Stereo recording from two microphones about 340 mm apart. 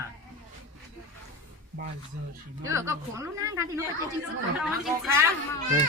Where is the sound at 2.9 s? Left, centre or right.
Centre.